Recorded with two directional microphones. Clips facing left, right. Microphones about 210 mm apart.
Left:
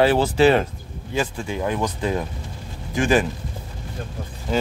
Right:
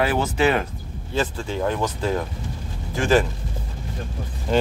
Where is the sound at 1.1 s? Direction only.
15° left (ahead or behind).